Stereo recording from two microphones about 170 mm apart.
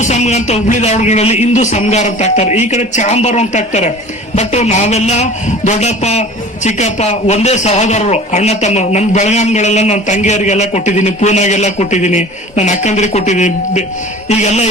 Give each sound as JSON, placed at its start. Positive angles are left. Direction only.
{"t": 0.0, "sound": "a man's voice", "side_deg": 40}